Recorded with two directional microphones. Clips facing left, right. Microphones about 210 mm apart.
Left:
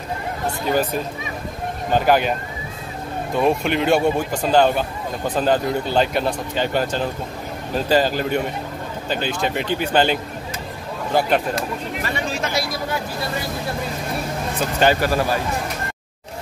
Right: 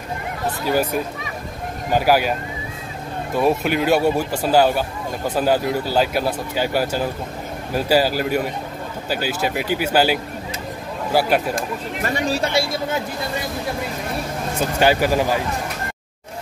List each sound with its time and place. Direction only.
0.7 s speech: 10° right (ahead or behind)
3.3 s speech: 5° right (ahead or behind)
11.5 s speech: 45° right (ahead or behind); by 13.0 s 25° right (ahead or behind)
14.8 s speech: 10° right (ahead or behind)